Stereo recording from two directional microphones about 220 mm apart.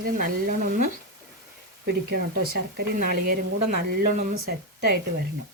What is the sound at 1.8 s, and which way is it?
Speech, 50° right (ahead or behind).